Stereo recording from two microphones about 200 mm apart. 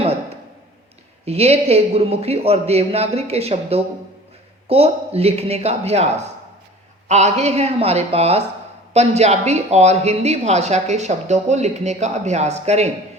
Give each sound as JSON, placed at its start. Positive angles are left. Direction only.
{"t": 1.2, "sound": "a woman's voice", "side_deg": -30}